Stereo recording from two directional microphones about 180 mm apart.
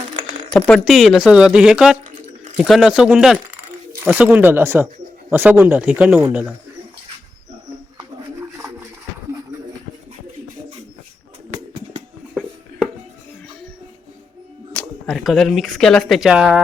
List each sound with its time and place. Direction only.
0.9 s speech: centre (ahead or behind)
7.9 s bird: 15° right (ahead or behind)
12.3 s a sound: centre (ahead or behind)
14.7 s speech: 5° left (ahead or behind)